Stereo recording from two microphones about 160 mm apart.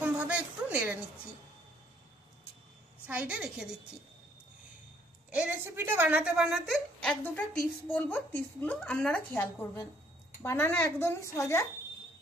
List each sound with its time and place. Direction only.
0.0 s a sound: 10° right (ahead or behind)
3.1 s a woman's voice: 10° right (ahead or behind)
5.3 s a woman's voice: 10° right (ahead or behind); by 11.6 s 15° left (ahead or behind)